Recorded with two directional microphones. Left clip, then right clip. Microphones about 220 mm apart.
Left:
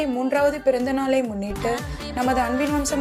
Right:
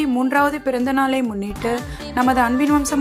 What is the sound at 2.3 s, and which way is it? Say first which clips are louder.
Speech: right 4 dB; 15° right (ahead or behind).